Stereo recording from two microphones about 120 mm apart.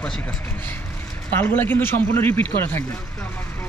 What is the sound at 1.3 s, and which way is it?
Speech, 15° left (ahead or behind).